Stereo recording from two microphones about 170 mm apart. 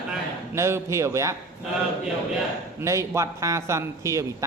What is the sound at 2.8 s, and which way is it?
Speech, 15° right (ahead or behind).